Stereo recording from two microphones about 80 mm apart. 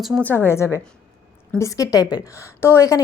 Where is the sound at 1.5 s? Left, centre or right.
Left.